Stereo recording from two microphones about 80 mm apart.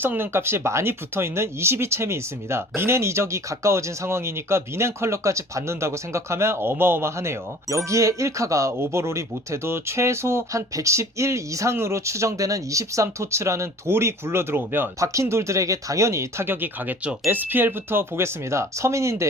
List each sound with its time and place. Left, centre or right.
0.0 s speech: right